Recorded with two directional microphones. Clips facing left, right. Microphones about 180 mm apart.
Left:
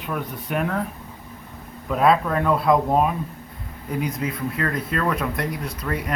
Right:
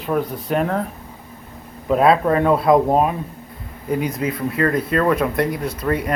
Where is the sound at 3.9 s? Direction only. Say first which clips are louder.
Right 2 dB; centre (ahead or behind).